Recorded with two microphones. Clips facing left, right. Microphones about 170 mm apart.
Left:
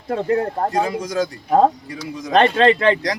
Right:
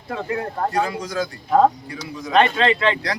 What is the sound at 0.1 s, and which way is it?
Speech, 40° left (ahead or behind).